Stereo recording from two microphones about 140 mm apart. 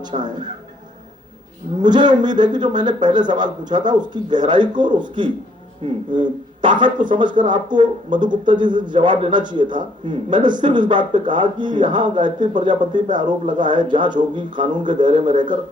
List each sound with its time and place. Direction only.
0.0 s speech: 30° right (ahead or behind)
1.8 s speech: 30° right (ahead or behind)